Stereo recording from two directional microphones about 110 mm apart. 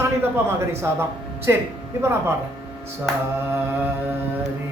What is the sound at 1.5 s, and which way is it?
Speech, 25° right (ahead or behind).